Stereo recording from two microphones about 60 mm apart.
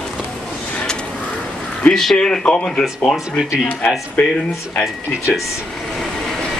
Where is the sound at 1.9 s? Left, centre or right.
Centre.